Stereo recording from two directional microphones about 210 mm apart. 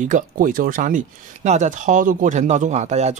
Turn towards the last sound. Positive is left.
turn(degrees=-35)  # may be behind; listen again after turning